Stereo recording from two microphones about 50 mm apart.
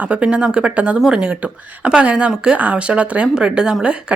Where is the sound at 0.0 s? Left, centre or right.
Right.